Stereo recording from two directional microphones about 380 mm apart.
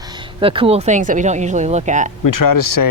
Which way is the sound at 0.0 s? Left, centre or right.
Centre.